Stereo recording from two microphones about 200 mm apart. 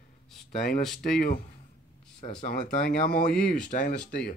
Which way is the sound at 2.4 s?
45° left (ahead or behind).